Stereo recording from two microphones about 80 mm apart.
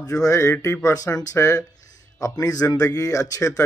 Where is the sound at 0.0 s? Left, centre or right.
Left.